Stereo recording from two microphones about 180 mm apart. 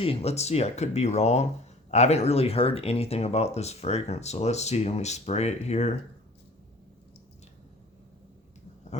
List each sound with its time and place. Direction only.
0.0 s speech: 35° left (ahead or behind)